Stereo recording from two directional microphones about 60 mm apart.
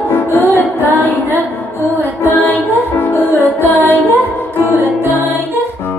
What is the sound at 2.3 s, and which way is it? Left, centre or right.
Music, left.